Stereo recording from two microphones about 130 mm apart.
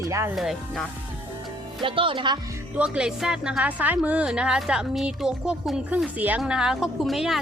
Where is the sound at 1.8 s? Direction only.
40° right (ahead or behind).